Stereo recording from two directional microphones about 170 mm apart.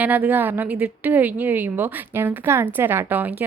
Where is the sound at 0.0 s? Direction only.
10° right (ahead or behind).